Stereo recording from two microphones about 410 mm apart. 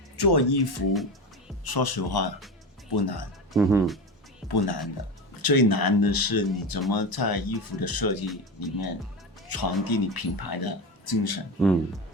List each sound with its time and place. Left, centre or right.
0.2 s speech: left
3.5 s speech: centre
4.4 s speech: left
11.6 s speech: centre